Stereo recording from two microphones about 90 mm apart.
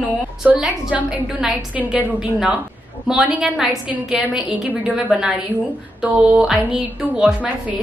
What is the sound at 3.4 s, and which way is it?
A woman's voice, centre (ahead or behind).